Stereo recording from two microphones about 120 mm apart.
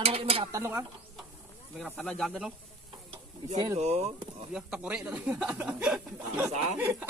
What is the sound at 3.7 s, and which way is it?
Speech, 65° right (ahead or behind).